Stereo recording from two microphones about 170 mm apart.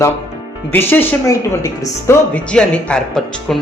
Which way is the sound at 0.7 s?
10° left (ahead or behind).